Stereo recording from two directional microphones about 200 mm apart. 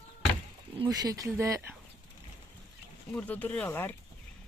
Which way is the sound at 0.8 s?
20° right (ahead or behind).